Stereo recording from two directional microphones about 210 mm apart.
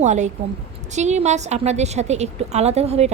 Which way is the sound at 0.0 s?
35° right (ahead or behind).